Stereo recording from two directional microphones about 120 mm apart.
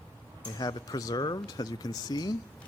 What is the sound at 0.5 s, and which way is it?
Speech, 35° left (ahead or behind).